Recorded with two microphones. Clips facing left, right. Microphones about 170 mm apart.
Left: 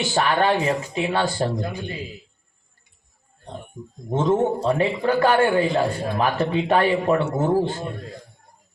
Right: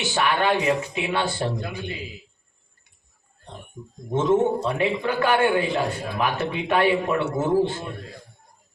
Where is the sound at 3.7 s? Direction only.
35° left (ahead or behind).